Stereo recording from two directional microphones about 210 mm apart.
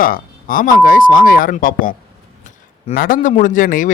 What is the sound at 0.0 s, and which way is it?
A man's voice, 40° left (ahead or behind).